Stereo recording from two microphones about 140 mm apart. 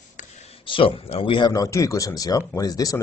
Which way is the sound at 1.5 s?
25° left (ahead or behind).